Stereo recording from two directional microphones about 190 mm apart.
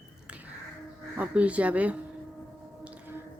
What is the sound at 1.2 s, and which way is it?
Speech, 5° right (ahead or behind).